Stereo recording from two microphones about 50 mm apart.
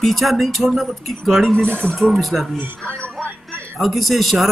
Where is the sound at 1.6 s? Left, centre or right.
Left.